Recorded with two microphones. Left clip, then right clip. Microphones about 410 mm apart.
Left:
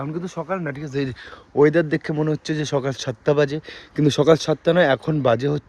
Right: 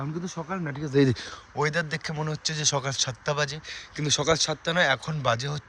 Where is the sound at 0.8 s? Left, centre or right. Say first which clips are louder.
Right 3 dB; centre.